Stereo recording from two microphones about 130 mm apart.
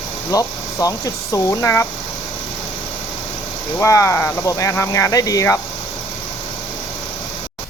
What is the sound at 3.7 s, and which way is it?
Speech, 25° left (ahead or behind).